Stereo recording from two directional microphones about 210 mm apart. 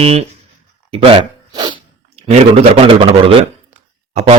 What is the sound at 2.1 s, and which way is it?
A man's voice, 30° right (ahead or behind).